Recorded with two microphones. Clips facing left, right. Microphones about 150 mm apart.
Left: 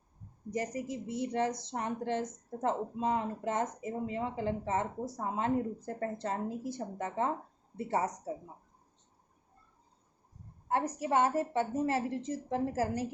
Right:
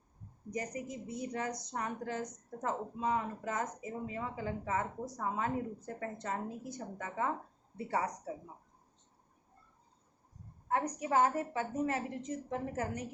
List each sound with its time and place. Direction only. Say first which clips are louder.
0.5 s a woman's voice: left 4 dB; 25° left (ahead or behind)
10.7 s a woman's voice: left 2 dB; 30° left (ahead or behind)